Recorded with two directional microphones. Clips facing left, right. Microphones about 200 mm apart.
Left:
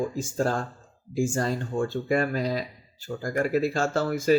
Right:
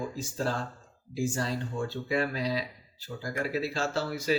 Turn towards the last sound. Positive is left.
turn(degrees=50)  # may be behind; listen again after turning